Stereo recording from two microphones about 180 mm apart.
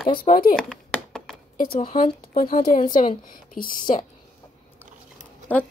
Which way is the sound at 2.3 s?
50° left (ahead or behind).